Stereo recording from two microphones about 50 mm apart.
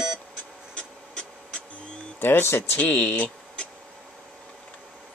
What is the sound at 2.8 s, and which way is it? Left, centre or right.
Speech, left.